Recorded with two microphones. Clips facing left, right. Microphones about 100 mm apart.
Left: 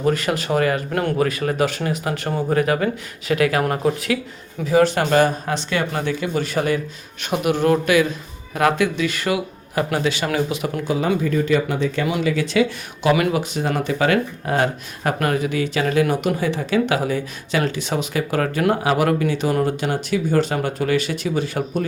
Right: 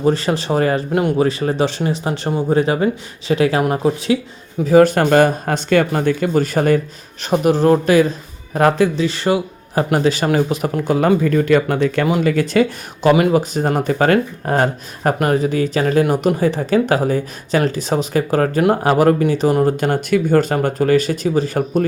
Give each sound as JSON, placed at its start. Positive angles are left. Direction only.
{"t": 0.0, "sound": "speech", "side_deg": -30}
{"t": 4.6, "sound": "speech", "side_deg": -45}
{"t": 12.2, "sound": "speech", "side_deg": -50}
{"t": 19.6, "sound": "speech", "side_deg": -50}